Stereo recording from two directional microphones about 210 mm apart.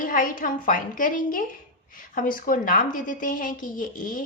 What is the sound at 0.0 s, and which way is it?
A woman's voice, 40° left (ahead or behind).